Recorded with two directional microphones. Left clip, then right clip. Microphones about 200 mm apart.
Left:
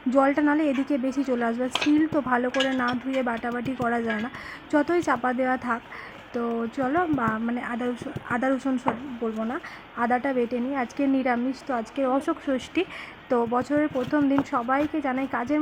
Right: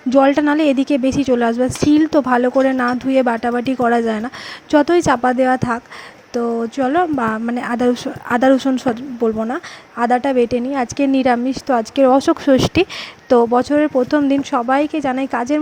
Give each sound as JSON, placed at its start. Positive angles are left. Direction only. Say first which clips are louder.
{"t": 0.1, "sound": "speech", "louder": "right 8 dB", "side_deg": -40}
{"t": 12.5, "sound": "speech", "louder": "right 13 dB", "side_deg": -70}
{"t": 13.2, "sound": "speech", "louder": "right 11 dB", "side_deg": -40}